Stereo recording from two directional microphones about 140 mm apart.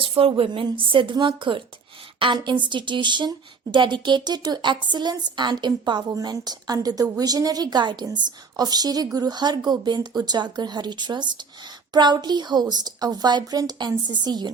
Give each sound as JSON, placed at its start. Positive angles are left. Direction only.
{"t": 0.0, "sound": "speech", "side_deg": -40}